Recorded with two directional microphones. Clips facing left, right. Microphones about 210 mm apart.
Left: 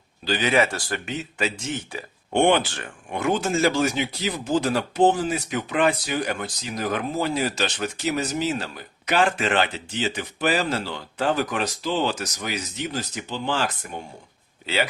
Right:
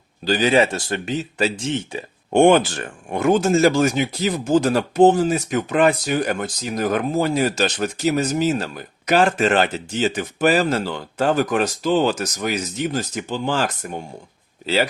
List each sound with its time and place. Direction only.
0.3 s speech: 35° right (ahead or behind)
2.3 s speech: 45° right (ahead or behind)